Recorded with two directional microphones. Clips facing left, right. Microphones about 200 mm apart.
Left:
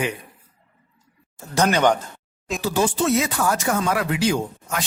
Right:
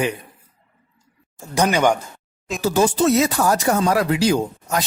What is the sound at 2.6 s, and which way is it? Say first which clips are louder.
Speech: right 4 dB; 40° right (ahead or behind).